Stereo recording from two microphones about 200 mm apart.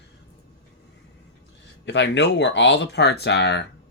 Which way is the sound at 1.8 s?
60° left (ahead or behind).